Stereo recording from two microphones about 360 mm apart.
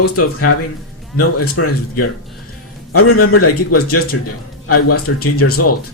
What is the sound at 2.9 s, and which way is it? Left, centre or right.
Speech, left.